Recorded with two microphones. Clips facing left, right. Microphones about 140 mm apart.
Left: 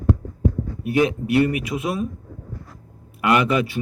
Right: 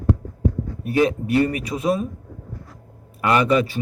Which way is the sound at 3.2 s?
35° right (ahead or behind).